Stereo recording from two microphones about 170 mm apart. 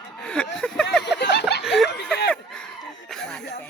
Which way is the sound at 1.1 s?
85° left.